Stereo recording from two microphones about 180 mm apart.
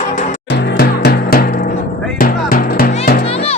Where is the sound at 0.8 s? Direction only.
60° left (ahead or behind).